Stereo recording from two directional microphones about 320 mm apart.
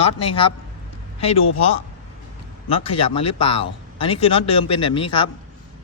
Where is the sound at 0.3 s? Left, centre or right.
Centre.